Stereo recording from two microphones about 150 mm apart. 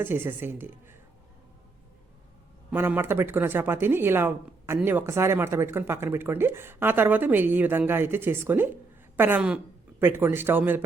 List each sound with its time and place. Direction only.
0.0 s speech: 15° right (ahead or behind)
2.6 s speech: 15° right (ahead or behind)